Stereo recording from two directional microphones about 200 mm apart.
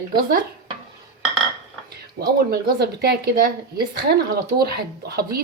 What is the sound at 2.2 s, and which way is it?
Speech, 55° right (ahead or behind).